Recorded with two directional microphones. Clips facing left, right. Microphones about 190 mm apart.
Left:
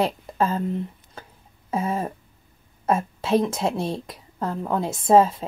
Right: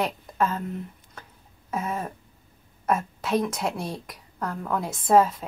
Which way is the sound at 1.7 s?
30° left (ahead or behind).